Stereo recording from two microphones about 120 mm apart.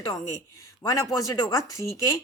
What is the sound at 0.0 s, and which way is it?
Speech, 25° left (ahead or behind).